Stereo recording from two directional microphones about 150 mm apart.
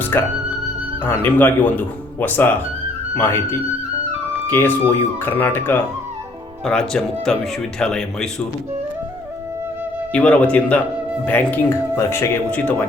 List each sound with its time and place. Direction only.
0.0 s music: 15° left (ahead or behind)
1.0 s speech: 15° left (ahead or behind)
10.1 s speech: 10° left (ahead or behind)